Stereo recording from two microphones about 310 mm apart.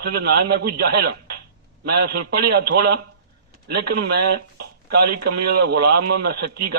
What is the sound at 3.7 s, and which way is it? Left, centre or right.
A man's voice, right.